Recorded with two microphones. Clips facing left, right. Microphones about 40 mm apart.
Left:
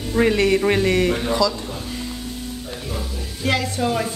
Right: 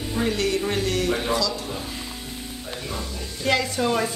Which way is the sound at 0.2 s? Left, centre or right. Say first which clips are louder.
Left 7 dB; left.